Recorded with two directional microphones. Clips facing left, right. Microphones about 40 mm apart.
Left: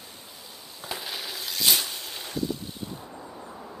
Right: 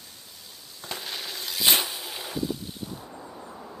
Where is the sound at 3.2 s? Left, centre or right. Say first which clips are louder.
Even; centre.